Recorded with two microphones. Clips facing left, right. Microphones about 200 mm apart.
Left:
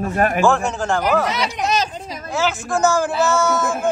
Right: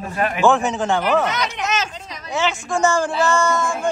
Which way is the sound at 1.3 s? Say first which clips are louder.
Left 2 dB; 30° left (ahead or behind).